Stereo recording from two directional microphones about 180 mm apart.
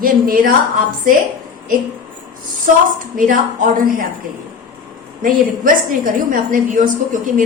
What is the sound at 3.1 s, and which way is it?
Speech, 50° right (ahead or behind).